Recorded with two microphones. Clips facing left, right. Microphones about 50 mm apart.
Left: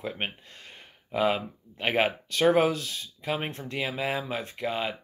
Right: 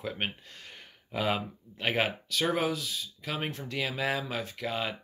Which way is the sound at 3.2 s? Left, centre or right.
Left.